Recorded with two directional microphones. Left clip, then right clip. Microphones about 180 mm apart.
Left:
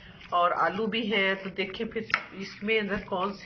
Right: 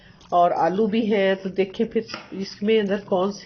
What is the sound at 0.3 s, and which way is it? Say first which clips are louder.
Speech: right 6 dB; 30° right (ahead or behind).